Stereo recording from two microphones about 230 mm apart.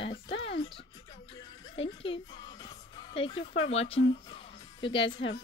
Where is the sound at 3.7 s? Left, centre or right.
Left.